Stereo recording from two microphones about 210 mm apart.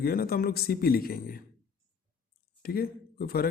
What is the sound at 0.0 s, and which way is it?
A man's voice, 45° left (ahead or behind).